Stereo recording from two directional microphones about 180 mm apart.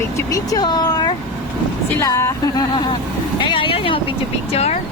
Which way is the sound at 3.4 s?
25° left (ahead or behind).